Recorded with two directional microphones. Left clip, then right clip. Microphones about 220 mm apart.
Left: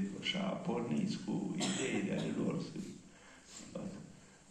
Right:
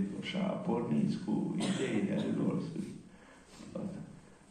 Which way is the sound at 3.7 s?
25° left (ahead or behind).